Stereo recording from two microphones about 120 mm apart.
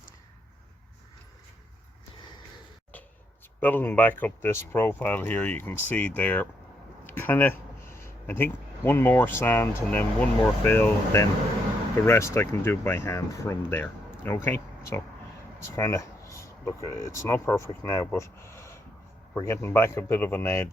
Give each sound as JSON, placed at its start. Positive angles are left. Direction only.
{"t": 3.6, "sound": "speech", "side_deg": 15}
{"t": 18.1, "sound": "a sound", "side_deg": 20}
{"t": 19.4, "sound": "speech", "side_deg": 20}